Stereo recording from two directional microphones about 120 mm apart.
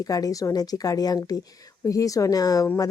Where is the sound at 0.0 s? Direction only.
30° left (ahead or behind).